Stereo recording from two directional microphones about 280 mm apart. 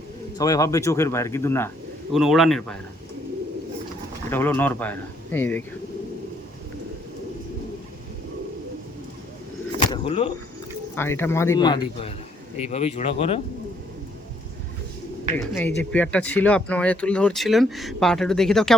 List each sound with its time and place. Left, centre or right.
0.3 s speech: centre
4.3 s speech: centre
9.8 s bird: centre
10.9 s speech: centre
15.4 s speech: centre